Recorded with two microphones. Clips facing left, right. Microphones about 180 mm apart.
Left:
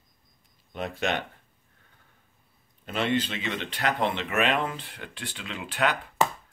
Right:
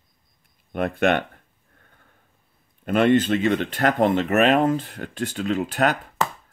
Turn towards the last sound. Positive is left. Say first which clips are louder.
# right 6 dB
turn(degrees=-45)  # may be behind; listen again after turning